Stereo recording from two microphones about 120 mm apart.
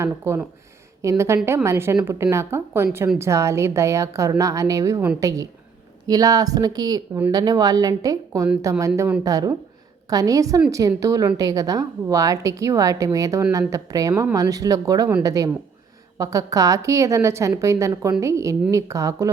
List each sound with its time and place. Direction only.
0.0 s a woman's voice: 20° right (ahead or behind)
6.1 s a woman's voice: 30° right (ahead or behind)